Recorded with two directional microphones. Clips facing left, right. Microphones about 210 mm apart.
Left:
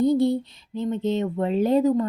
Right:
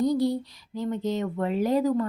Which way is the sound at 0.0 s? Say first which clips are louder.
Left 4 dB; 25° left (ahead or behind).